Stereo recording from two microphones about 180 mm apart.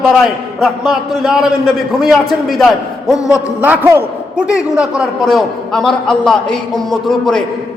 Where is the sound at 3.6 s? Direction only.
10° right (ahead or behind).